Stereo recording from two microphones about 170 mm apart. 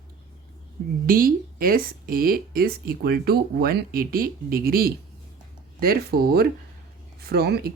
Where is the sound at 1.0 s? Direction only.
55° right (ahead or behind).